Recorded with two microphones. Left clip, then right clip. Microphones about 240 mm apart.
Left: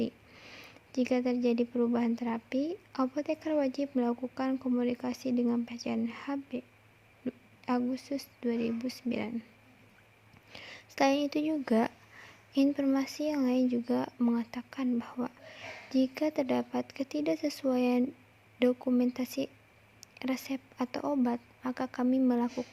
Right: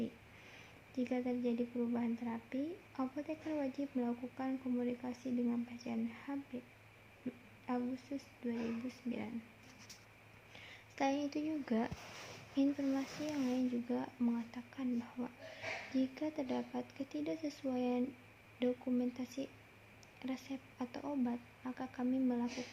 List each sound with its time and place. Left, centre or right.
0.0 s speech: left
7.6 s speech: left
10.5 s a woman's voice: left